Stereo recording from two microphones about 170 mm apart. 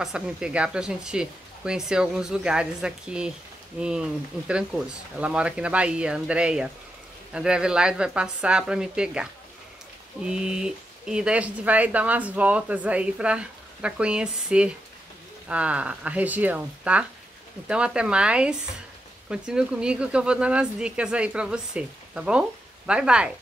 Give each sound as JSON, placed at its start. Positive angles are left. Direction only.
{"t": 0.0, "sound": "speech", "side_deg": -5}